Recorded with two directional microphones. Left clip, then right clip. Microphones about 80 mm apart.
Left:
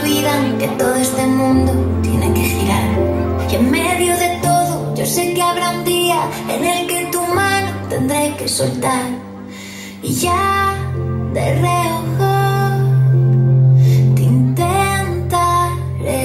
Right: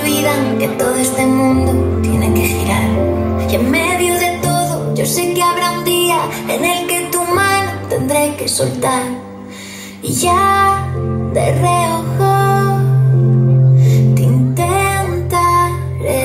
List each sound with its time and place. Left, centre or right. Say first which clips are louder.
0.0 s music: right 1 dB; centre
10.2 s music: right 4 dB; right
13.7 s music: right 2 dB; right